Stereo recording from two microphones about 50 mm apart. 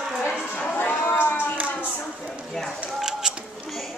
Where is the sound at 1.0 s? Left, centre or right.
Left.